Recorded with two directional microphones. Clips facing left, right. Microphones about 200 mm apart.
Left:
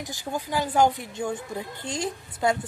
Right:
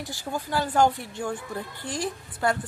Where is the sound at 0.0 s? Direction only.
15° left (ahead or behind).